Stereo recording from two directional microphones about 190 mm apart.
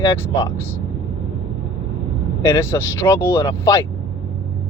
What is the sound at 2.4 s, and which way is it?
Speech, 15° left (ahead or behind).